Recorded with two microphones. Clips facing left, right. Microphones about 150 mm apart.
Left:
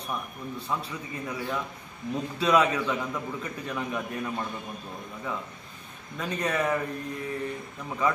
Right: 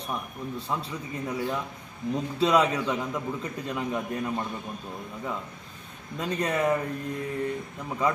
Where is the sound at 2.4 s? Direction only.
25° right (ahead or behind).